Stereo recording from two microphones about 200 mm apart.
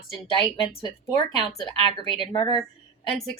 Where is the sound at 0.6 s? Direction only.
30° left (ahead or behind).